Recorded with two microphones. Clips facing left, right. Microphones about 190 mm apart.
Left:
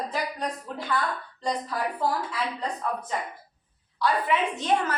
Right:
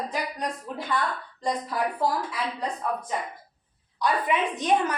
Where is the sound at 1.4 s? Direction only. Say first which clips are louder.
Right 1 dB; 10° right (ahead or behind).